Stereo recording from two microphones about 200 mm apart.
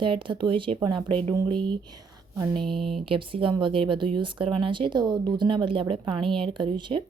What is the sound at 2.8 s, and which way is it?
Speech, centre (ahead or behind).